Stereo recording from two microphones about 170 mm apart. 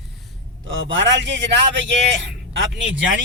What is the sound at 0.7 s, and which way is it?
A man's voice, 90° right.